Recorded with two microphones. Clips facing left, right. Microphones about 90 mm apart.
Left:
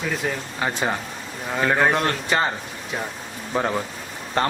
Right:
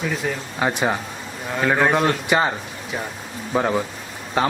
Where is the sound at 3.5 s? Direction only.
5° right (ahead or behind).